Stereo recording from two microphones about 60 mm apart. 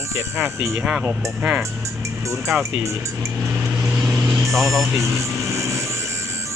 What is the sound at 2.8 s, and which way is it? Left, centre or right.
Speech, right.